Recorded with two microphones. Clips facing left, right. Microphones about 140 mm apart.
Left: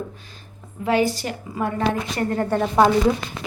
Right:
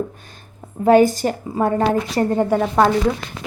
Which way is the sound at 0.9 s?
45° right (ahead or behind).